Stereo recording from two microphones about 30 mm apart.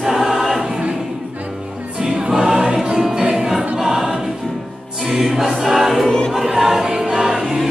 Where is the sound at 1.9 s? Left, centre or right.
Right.